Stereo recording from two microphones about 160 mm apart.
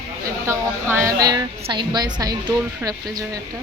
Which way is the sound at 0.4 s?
15° right (ahead or behind).